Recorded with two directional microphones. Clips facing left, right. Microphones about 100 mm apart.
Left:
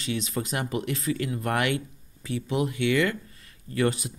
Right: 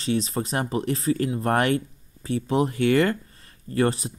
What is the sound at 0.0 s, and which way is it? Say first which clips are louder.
Speech: right 5 dB; 35° right (ahead or behind).